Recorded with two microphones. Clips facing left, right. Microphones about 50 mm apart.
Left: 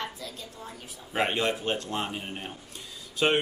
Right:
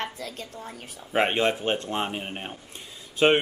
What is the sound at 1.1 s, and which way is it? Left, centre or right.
Speech, right.